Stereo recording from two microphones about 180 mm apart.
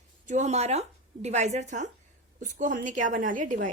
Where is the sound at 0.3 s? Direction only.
40° right (ahead or behind).